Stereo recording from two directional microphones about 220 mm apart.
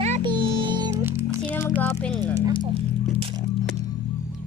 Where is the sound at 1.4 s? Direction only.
10° left (ahead or behind).